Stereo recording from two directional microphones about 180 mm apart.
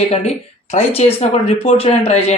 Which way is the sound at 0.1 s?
40° left (ahead or behind).